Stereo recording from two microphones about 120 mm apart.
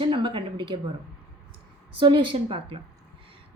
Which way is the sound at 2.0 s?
40° right (ahead or behind).